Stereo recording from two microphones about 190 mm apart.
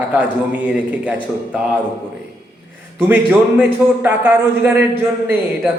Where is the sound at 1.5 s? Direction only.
5° right (ahead or behind).